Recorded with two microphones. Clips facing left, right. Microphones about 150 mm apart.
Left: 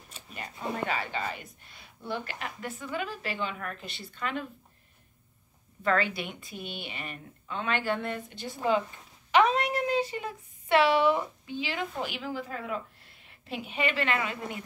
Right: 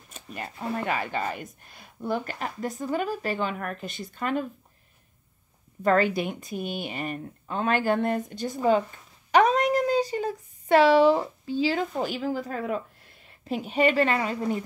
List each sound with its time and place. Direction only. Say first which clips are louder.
0.1 s speech: right 5 dB; 45° right (ahead or behind)
5.8 s a woman's voice: right 6 dB; 45° right (ahead or behind)